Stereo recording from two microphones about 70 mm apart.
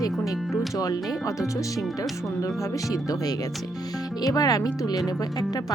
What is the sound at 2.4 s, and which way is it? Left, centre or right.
Speech, left.